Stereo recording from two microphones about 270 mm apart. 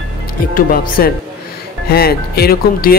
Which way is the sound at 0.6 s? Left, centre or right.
Left.